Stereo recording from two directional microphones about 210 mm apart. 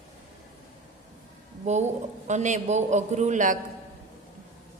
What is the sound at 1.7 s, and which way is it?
A man's voice, 35° right (ahead or behind).